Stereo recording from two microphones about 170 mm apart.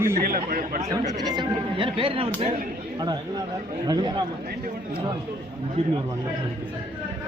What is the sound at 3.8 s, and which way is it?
Speech, 25° right (ahead or behind).